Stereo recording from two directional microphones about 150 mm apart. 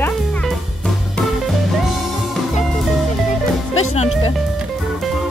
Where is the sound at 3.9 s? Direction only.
45° left (ahead or behind).